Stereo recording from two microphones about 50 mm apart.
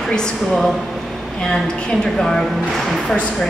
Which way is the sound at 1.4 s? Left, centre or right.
Centre.